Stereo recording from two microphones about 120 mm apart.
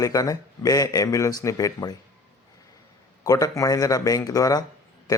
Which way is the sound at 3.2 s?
30° left (ahead or behind).